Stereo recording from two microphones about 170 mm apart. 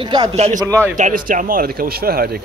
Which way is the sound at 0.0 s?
25° right (ahead or behind).